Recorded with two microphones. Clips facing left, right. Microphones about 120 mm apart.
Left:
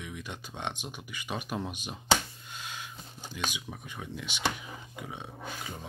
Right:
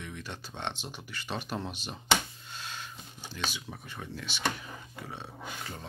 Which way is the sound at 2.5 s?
10° left (ahead or behind).